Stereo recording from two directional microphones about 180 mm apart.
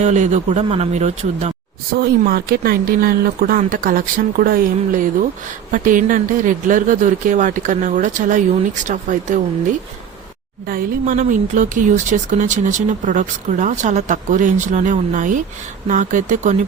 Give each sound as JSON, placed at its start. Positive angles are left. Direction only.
{"t": 0.0, "sound": "speech", "side_deg": -40}
{"t": 2.0, "sound": "speech", "side_deg": -55}
{"t": 10.7, "sound": "speech", "side_deg": -45}